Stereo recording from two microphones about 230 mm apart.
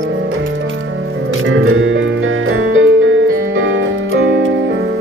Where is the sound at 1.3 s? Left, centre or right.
Right.